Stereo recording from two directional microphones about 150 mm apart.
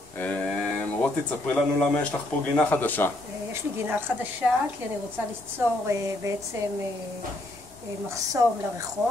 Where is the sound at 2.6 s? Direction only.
10° left (ahead or behind).